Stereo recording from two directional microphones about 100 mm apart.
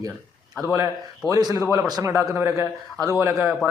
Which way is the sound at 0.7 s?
30° right (ahead or behind).